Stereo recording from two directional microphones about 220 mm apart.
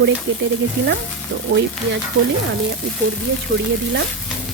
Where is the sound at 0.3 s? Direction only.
55° right (ahead or behind).